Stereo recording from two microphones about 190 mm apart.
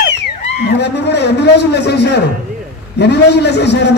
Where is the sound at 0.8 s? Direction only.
60° left (ahead or behind).